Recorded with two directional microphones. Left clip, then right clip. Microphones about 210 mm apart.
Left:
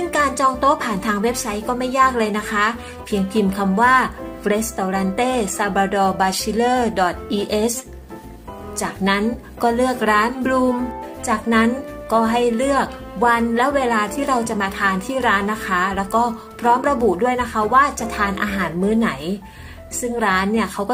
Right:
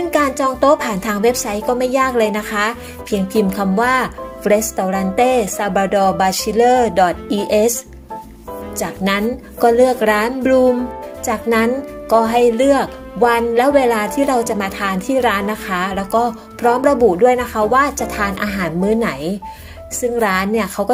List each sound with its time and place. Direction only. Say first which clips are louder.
0.1 s a woman's voice: even; 30° right (ahead or behind)
8.8 s a woman's voice: right 1 dB; 35° right (ahead or behind)